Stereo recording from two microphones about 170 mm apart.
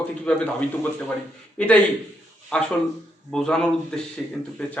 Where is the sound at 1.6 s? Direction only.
5° left (ahead or behind).